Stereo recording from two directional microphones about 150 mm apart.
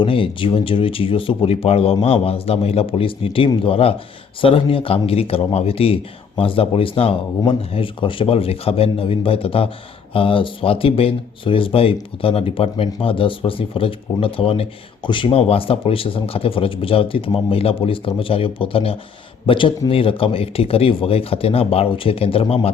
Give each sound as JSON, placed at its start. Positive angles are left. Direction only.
{"t": 0.0, "sound": "speech", "side_deg": 35}